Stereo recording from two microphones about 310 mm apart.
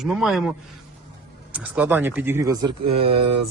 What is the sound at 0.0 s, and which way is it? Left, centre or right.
Speech, centre.